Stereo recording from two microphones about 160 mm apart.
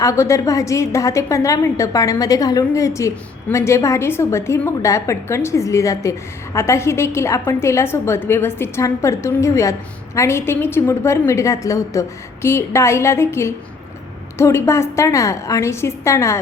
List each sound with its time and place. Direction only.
0.0 s a woman's voice: 20° left (ahead or behind)